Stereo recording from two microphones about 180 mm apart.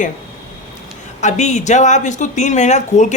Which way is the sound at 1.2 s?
40° left (ahead or behind).